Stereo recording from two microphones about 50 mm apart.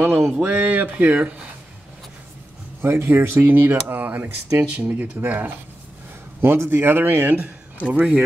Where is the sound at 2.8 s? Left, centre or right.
Right.